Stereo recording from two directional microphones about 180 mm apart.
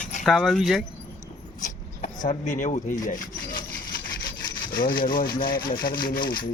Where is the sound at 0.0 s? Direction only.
45° left (ahead or behind).